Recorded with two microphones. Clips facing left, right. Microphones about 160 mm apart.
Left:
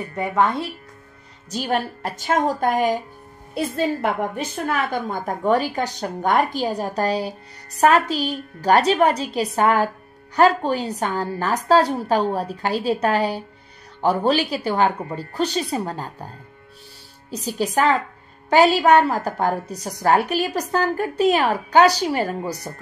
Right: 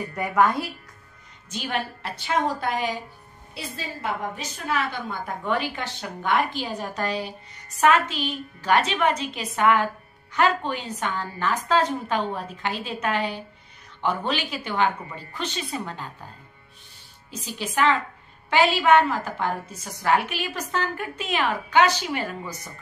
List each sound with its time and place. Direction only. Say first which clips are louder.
0.1 s speech: left 1 dB; 25° left (ahead or behind)
1.5 s a woman's voice: left 6 dB; 40° left (ahead or behind)
17.3 s a woman's voice: left 9 dB; 40° left (ahead or behind)